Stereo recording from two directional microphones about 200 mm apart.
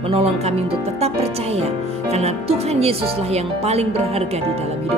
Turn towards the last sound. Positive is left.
turn(degrees=-30)  # may be behind; listen again after turning